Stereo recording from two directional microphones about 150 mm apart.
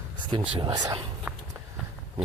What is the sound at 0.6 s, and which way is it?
Speech, 30° right (ahead or behind).